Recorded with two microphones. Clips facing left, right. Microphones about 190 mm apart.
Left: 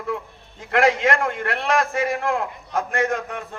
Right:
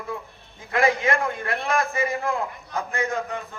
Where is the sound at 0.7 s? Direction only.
90° left.